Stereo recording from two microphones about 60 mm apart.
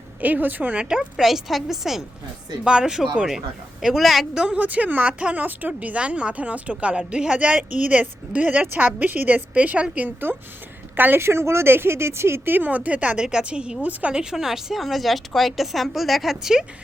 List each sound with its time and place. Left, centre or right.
0.2 s speech: right
1.1 s a woman's voice: centre; by 11.2 s right
11.2 s speech: right
12.5 s a woman's voice: right; by 16.6 s centre